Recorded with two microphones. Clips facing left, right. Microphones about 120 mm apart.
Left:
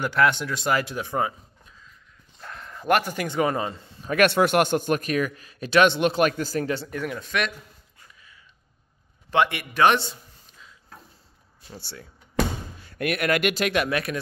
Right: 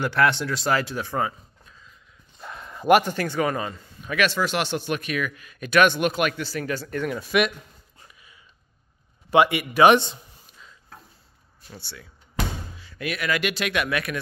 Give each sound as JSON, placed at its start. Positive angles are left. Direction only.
{"t": 0.0, "sound": "speech", "side_deg": 15}
{"t": 2.4, "sound": "a sound", "side_deg": -5}
{"t": 3.1, "sound": "speech", "side_deg": 15}
{"t": 4.1, "sound": "a man's voice", "side_deg": 55}
{"t": 6.6, "sound": "speech", "side_deg": 25}
{"t": 6.9, "sound": "speech", "side_deg": 5}
{"t": 7.2, "sound": "a man's voice", "side_deg": -5}
{"t": 8.1, "sound": "a sound", "side_deg": -15}
{"t": 9.3, "sound": "a man's voice", "side_deg": -5}
{"t": 11.8, "sound": "a man's voice", "side_deg": 40}
{"t": 12.7, "sound": "speech", "side_deg": 55}